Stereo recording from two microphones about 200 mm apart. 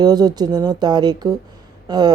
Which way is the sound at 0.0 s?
20° right (ahead or behind).